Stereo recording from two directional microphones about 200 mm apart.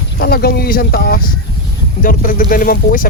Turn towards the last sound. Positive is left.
turn(degrees=45)  # may be behind; listen again after turning